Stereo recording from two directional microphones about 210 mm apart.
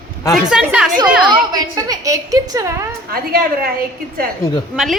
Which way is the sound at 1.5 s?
15° right (ahead or behind).